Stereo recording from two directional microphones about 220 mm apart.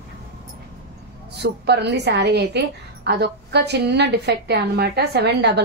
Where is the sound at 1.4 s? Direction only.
50° right (ahead or behind).